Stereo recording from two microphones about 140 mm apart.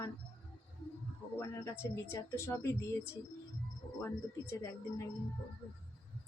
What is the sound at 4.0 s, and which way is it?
Speech, 15° left (ahead or behind).